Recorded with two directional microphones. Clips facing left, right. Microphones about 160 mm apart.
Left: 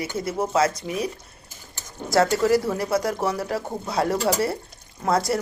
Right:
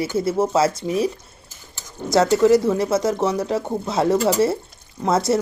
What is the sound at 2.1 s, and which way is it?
Speech, 20° right (ahead or behind).